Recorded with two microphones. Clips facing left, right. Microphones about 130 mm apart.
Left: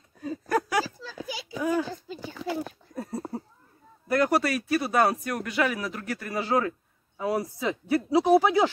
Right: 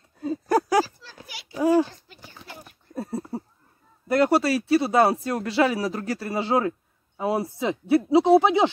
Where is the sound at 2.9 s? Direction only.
25° right (ahead or behind).